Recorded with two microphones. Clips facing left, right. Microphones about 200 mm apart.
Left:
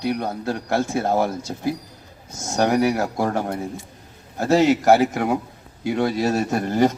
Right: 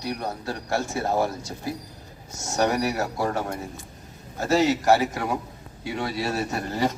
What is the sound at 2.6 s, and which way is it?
Speech, 60° left (ahead or behind).